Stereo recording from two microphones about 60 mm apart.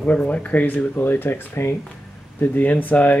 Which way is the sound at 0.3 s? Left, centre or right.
Left.